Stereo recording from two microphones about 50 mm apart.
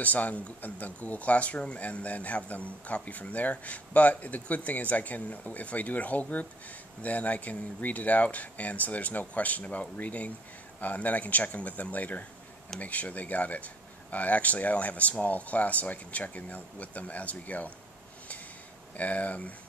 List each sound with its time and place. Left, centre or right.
0.0 s speech: left
18.9 s speech: left